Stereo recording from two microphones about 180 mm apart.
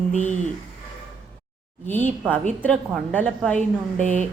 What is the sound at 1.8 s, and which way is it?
A woman's voice, 10° left (ahead or behind).